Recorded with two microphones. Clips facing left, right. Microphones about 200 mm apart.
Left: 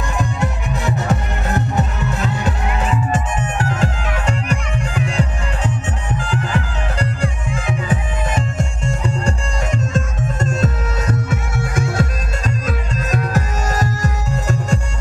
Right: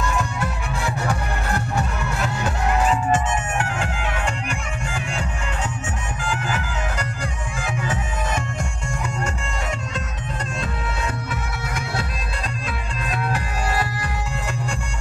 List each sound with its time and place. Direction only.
0.0 s music: 15° left (ahead or behind)
3.5 s music: 35° left (ahead or behind)
6.1 s bagpipes: 35° left (ahead or behind)
7.9 s music: 30° left (ahead or behind)